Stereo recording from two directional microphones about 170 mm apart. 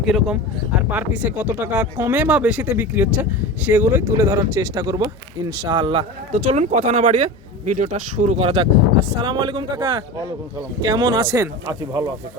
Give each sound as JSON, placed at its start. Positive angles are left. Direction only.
{"t": 0.0, "sound": "speech", "side_deg": 0}
{"t": 6.3, "sound": "speech", "side_deg": -45}